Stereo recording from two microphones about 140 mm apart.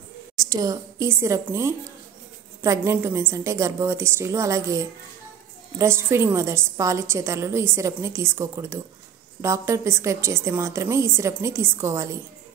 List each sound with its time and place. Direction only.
0.4 s a woman's voice: 25° right (ahead or behind)